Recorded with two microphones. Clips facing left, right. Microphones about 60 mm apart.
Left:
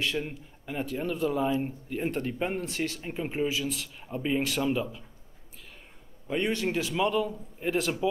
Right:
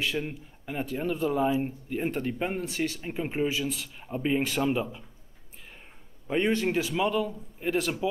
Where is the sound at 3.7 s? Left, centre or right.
Centre.